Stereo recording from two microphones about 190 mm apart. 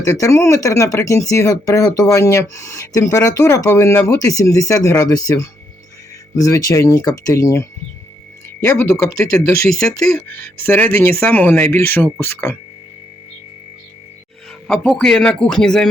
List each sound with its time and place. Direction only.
0.0 s speech: 15° left (ahead or behind)
9.8 s speech: 5° left (ahead or behind)
14.7 s speech: 5° left (ahead or behind)